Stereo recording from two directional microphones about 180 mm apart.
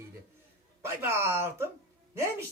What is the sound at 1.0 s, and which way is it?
Speech, 15° right (ahead or behind).